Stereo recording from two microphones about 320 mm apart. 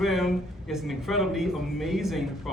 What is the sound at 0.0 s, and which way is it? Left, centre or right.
A man's voice, centre.